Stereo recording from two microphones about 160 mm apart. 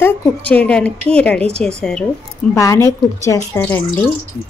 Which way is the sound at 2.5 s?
20° left (ahead or behind).